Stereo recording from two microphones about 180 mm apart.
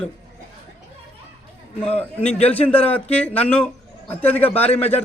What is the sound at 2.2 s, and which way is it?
A man's voice, 5° left (ahead or behind).